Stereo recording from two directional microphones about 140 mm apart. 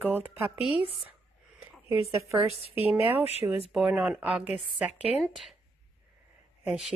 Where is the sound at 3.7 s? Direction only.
5° right (ahead or behind).